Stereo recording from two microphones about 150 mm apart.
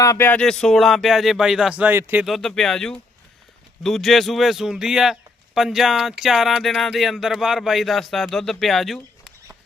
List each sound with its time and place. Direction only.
0.0 s speech: 15° left (ahead or behind); by 2.2 s 15° right (ahead or behind)
2.2 s speech: centre (ahead or behind)